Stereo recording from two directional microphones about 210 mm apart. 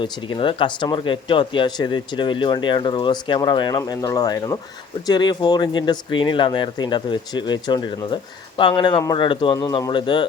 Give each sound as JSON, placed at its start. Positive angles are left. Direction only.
{"t": 0.0, "sound": "speech", "side_deg": 25}